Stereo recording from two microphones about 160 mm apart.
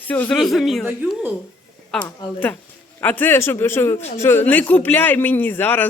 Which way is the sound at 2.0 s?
10° left (ahead or behind).